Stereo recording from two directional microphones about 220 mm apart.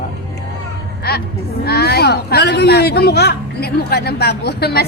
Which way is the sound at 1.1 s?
45° left (ahead or behind).